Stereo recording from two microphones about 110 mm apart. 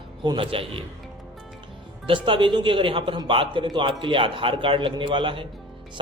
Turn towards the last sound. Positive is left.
turn(degrees=-50)  # may be behind; listen again after turning